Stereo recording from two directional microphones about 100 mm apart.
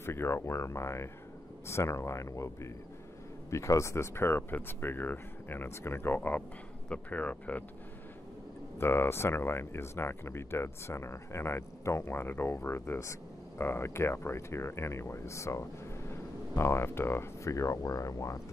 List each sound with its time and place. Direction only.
0.0 s speech: 25° left (ahead or behind)
8.7 s speech: 25° left (ahead or behind)